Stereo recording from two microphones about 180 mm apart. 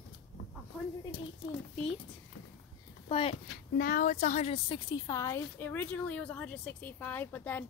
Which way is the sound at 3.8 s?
50° left (ahead or behind).